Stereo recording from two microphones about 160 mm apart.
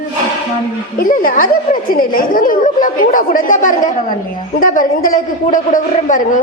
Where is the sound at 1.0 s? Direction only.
60° left (ahead or behind).